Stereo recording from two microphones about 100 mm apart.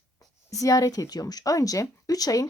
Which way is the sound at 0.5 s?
35° left (ahead or behind).